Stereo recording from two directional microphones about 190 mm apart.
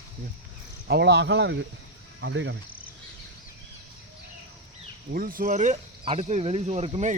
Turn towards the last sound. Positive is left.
turn(degrees=-35)  # may be behind; listen again after turning